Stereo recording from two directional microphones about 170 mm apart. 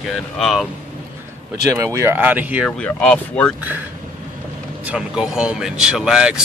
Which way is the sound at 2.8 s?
5° left (ahead or behind).